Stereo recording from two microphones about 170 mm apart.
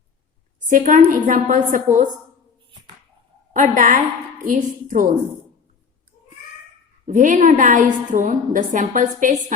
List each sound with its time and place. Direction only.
0.7 s a woman's voice: 50° right (ahead or behind)
3.5 s a woman's voice: 50° right (ahead or behind)
7.0 s a woman's voice: 50° right (ahead or behind)